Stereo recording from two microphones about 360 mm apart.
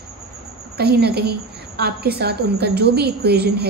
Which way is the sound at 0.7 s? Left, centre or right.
Right.